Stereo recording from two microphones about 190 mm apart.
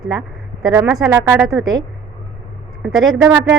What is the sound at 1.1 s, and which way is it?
Speech, 15° right (ahead or behind).